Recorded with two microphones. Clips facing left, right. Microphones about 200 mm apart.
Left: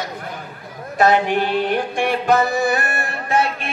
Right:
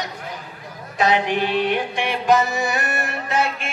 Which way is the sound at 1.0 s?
50° left (ahead or behind).